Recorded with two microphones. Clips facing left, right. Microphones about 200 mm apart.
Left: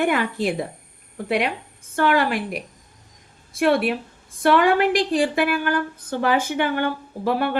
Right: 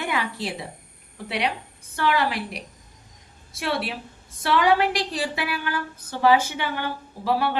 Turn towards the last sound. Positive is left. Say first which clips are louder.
# left 2 dB
turn(degrees=55)  # may be behind; listen again after turning